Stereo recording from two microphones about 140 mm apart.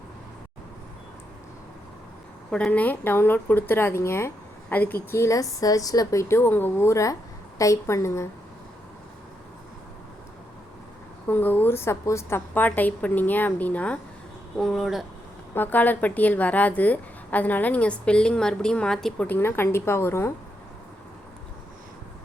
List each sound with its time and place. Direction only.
2.5 s a woman's voice: 10° left (ahead or behind)
11.3 s a woman's voice: 15° left (ahead or behind)
15.5 s a woman's voice: 10° left (ahead or behind)